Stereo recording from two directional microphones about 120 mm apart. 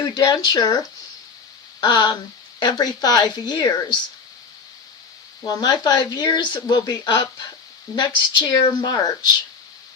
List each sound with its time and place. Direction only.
0.0 s speech: 35° left (ahead or behind)
1.8 s speech: 35° left (ahead or behind)
5.5 s speech: 35° left (ahead or behind)